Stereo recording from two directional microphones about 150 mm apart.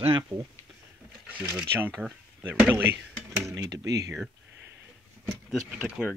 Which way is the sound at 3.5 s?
20° right (ahead or behind).